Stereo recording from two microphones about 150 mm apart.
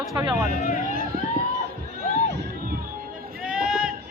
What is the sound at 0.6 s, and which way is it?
Speech, 60° left (ahead or behind).